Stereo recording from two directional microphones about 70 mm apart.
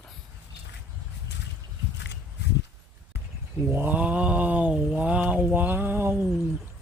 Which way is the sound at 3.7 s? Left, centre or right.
Right.